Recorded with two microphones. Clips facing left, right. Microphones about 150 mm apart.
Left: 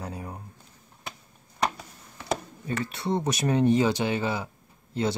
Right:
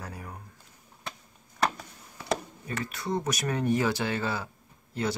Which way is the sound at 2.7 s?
30° left (ahead or behind).